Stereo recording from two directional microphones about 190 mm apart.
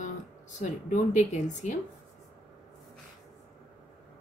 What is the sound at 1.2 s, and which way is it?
Speech, 40° left (ahead or behind).